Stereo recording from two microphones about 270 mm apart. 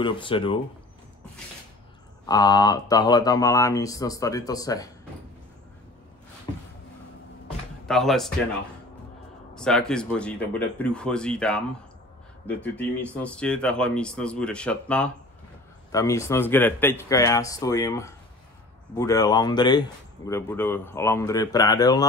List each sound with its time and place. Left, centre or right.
0.0 s speech: centre
2.2 s speech: centre
7.8 s speech: centre
9.6 s speech: centre